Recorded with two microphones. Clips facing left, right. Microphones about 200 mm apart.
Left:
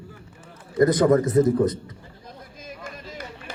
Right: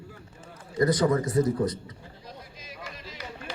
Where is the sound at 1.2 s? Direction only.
20° left (ahead or behind).